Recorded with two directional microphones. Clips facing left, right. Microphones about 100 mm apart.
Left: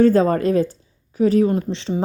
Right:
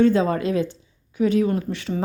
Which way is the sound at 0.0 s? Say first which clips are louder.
Left 4 dB; 45° left (ahead or behind).